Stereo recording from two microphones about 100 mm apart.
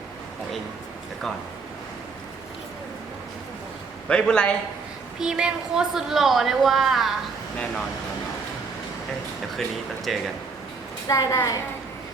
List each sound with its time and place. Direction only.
4.1 s a man's voice: 10° left (ahead or behind)
5.2 s a woman's voice: 10° right (ahead or behind)
9.6 s a woman's voice: centre (ahead or behind)
11.1 s a woman's voice: 35° left (ahead or behind)